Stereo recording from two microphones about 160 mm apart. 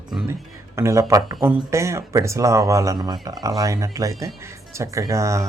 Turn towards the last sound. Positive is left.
turn(degrees=-20)  # may be behind; listen again after turning